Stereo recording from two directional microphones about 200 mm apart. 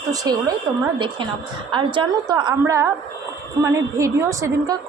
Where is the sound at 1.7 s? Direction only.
25° right (ahead or behind).